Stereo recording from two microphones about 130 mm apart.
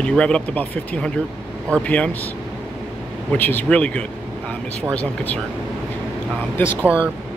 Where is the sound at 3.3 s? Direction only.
15° left (ahead or behind).